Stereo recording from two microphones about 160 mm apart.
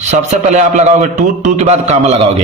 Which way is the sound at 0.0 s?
45° right (ahead or behind).